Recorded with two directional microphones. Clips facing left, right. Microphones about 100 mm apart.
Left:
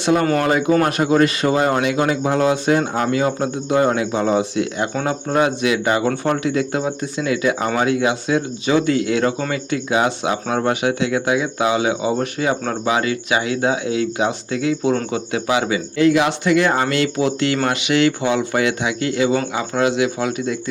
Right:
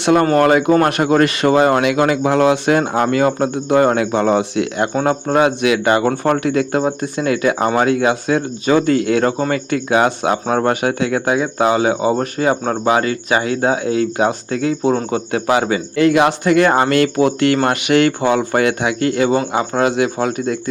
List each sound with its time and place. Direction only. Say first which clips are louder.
0.0 s speech: right 4 dB; 65° right (ahead or behind); by 15.8 s 45° right (ahead or behind)
16.0 s speech: right 2 dB; 55° right (ahead or behind)